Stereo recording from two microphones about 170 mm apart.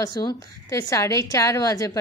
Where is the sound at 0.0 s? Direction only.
20° left (ahead or behind).